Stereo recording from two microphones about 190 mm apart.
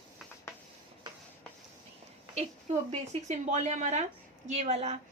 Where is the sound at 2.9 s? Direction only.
35° right (ahead or behind).